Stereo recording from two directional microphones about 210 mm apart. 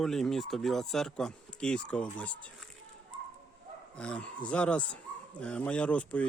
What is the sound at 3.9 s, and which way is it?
Speech, 5° left (ahead or behind).